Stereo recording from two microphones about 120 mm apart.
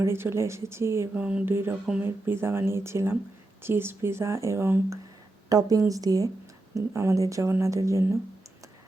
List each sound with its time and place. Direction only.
0.0 s speech: 20° right (ahead or behind)